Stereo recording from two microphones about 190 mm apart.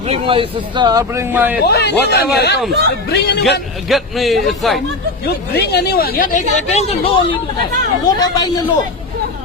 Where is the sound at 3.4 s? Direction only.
Centre (ahead or behind).